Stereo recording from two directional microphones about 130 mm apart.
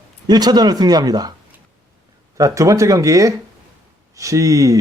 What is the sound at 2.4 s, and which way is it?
Speech, 25° right (ahead or behind).